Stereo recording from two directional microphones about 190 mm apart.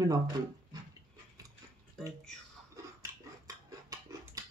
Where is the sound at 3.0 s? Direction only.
20° right (ahead or behind).